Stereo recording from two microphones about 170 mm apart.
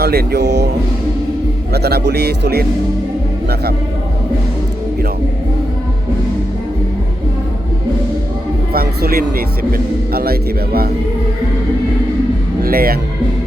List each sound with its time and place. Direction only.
0.0 s speech: 70° right (ahead or behind)
1.7 s speech: 70° right (ahead or behind)
8.7 s a man's voice: 60° right (ahead or behind)
12.6 s speech: 60° right (ahead or behind)